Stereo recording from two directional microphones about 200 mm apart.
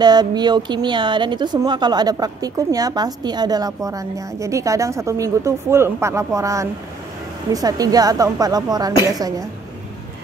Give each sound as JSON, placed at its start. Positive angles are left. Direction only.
{"t": 0.0, "sound": "speech", "side_deg": -20}